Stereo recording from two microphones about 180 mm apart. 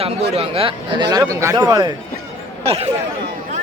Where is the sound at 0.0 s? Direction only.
35° right (ahead or behind).